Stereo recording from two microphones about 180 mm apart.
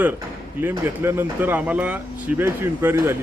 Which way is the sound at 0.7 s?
15° right (ahead or behind).